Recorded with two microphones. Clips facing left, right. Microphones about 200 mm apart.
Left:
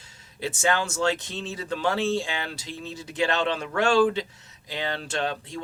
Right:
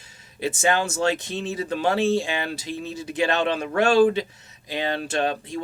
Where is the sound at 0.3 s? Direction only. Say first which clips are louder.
Right 3 dB; 15° right (ahead or behind).